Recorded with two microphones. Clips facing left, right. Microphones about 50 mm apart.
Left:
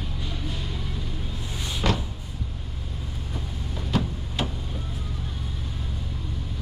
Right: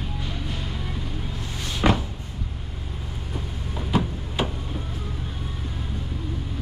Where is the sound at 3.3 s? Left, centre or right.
Centre.